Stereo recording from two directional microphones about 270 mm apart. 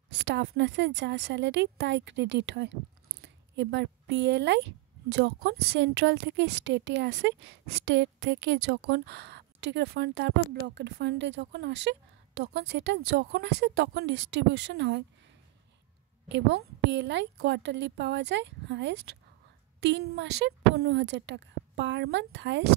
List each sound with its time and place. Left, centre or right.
0.1 s a woman's voice: right
16.3 s a woman's voice: right